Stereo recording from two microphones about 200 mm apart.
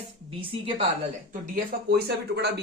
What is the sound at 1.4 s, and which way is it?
Speech, 45° right (ahead or behind).